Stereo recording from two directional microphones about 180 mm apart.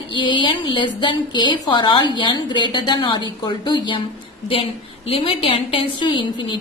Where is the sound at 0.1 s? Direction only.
25° left (ahead or behind).